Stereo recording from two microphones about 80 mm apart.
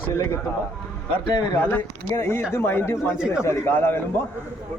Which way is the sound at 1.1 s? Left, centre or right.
Left.